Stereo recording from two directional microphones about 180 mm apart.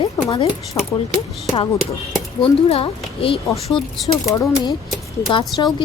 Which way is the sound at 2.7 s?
30° left (ahead or behind).